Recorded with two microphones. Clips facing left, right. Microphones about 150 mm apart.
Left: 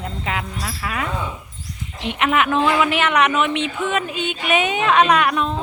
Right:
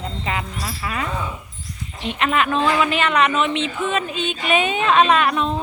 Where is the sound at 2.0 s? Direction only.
15° left (ahead or behind).